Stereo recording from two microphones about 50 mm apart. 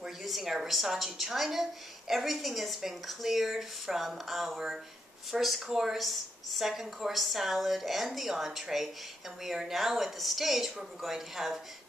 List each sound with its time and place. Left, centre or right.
0.2 s a woman's voice: centre